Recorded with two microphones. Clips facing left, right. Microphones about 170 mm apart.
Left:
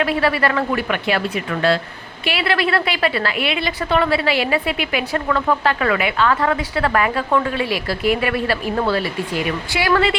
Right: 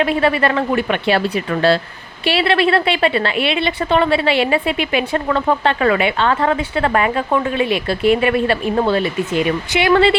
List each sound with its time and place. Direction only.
0.0 s a woman's voice: 25° right (ahead or behind)